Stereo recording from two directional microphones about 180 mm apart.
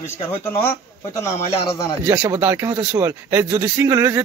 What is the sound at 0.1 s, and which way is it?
Speech, 15° left (ahead or behind).